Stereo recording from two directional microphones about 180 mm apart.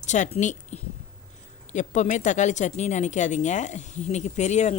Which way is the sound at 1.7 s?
40° left (ahead or behind).